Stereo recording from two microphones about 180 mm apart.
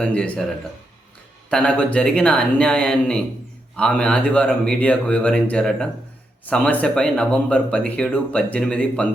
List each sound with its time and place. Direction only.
0.0 s speech: 5° left (ahead or behind)
1.5 s speech: 5° left (ahead or behind)